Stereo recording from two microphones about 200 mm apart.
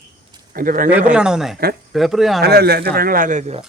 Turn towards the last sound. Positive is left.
turn(degrees=-35)  # may be behind; listen again after turning